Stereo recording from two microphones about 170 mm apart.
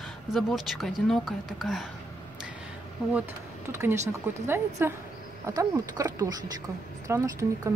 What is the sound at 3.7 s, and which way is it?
A woman's voice, 15° right (ahead or behind).